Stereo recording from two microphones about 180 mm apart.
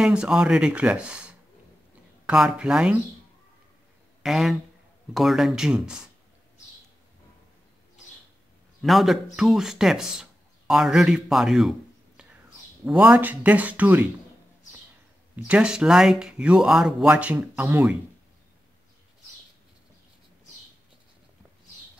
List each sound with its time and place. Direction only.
0.0 s speech: 5° right (ahead or behind)
4.2 s speech: centre (ahead or behind)
8.8 s speech: centre (ahead or behind)
12.8 s speech: 5° right (ahead or behind)
15.3 s speech: 5° right (ahead or behind)